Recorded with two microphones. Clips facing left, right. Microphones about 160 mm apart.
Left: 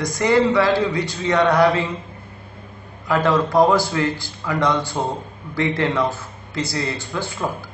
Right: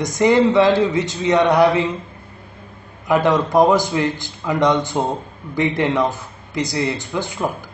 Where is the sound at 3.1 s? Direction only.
20° right (ahead or behind).